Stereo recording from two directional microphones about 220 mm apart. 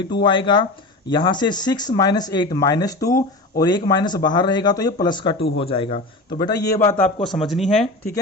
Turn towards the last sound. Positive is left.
turn(degrees=0)  # may be behind; listen again after turning